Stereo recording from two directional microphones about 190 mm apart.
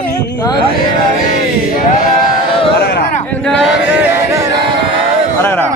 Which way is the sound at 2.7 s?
55° left (ahead or behind).